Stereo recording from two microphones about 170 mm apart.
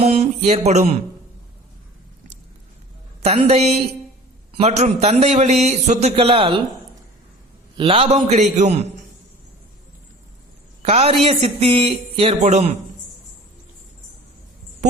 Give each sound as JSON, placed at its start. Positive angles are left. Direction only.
{"t": 0.0, "sound": "a man's voice", "side_deg": -40}
{"t": 3.2, "sound": "a man's voice", "side_deg": -35}
{"t": 7.8, "sound": "a man's voice", "side_deg": -35}
{"t": 10.8, "sound": "a man's voice", "side_deg": -40}